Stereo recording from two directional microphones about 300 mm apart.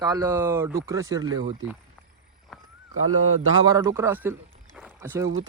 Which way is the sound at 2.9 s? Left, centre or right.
Right.